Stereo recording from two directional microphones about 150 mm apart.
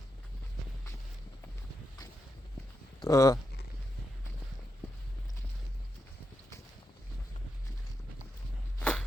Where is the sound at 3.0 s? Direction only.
20° left (ahead or behind).